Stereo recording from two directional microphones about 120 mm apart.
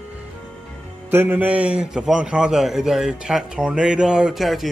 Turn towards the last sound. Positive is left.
turn(degrees=0)  # may be behind; listen again after turning